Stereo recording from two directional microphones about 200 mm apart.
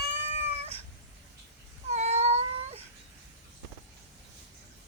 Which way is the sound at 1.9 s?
35° right (ahead or behind).